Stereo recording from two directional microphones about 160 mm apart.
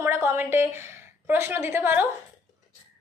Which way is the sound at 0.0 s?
15° right (ahead or behind).